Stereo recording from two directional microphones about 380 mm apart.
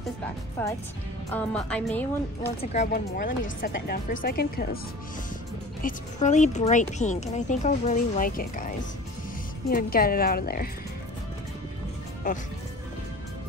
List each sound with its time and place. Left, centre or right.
1.3 s speech: centre
2.6 s a woman's voice: centre
5.8 s a woman's voice: centre